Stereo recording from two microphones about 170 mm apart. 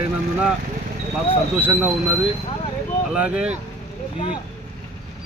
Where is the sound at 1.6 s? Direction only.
10° right (ahead or behind).